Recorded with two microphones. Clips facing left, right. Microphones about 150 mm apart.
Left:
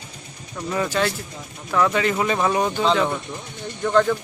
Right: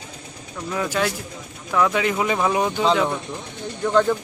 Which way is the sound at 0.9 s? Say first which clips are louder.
Even; 10° right (ahead or behind).